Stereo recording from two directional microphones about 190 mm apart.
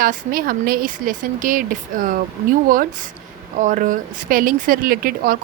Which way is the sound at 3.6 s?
45° right (ahead or behind).